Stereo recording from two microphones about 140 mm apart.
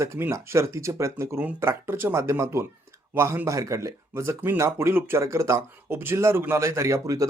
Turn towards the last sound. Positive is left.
turn(degrees=-20)  # may be behind; listen again after turning